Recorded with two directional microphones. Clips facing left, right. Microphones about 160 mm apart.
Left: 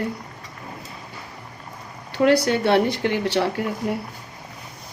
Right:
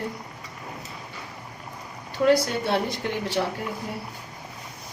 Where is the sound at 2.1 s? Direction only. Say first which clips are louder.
Left 3 dB; 75° left (ahead or behind).